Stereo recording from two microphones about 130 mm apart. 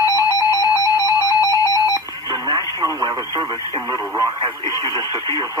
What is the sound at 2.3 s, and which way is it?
Radio, 30° left (ahead or behind).